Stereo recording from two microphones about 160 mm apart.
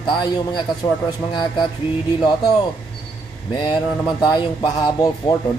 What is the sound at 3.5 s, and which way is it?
Speech, 30° left (ahead or behind).